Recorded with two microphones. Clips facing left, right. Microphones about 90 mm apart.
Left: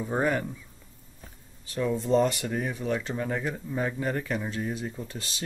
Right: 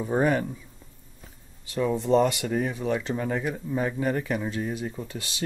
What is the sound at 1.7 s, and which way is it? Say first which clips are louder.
Speech: right 2 dB; 10° right (ahead or behind).